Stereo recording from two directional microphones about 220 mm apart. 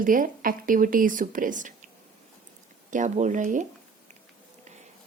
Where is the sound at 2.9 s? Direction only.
35° right (ahead or behind).